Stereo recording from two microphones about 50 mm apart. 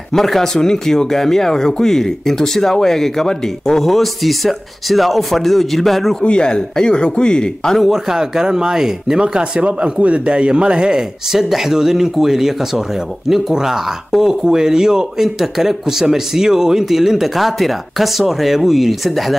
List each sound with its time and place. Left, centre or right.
0.1 s speech: centre
6.2 s speech: centre
7.9 s speech: centre